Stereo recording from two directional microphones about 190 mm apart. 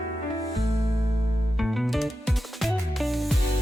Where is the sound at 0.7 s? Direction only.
15° right (ahead or behind).